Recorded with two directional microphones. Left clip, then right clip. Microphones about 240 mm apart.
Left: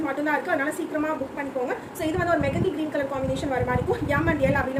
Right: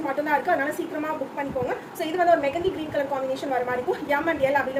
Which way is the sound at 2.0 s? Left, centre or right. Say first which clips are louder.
Right 4 dB; left.